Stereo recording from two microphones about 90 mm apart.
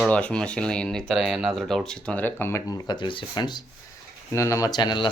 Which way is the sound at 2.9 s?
65° left (ahead or behind).